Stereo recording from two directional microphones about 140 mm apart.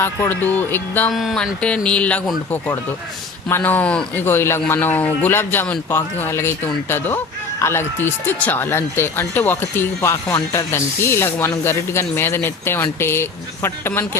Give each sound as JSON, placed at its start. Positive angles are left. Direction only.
{"t": 0.0, "sound": "speech", "side_deg": 15}
{"t": 1.1, "sound": "speech", "side_deg": 0}